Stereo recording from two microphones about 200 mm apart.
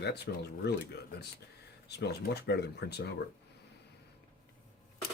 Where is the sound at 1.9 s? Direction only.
55° left (ahead or behind).